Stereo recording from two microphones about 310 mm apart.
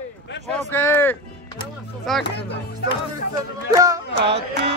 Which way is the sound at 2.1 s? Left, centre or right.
Centre.